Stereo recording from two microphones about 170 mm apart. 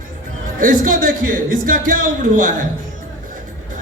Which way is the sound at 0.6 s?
55° right (ahead or behind).